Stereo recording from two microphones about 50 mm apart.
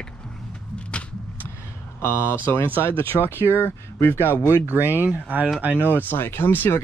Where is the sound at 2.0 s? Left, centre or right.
Left.